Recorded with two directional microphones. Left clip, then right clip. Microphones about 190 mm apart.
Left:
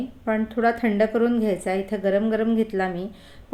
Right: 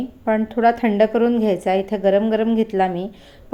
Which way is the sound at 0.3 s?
10° right (ahead or behind).